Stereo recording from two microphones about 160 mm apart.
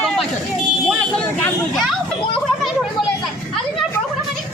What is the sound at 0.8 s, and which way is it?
Vehicle, 5° left (ahead or behind).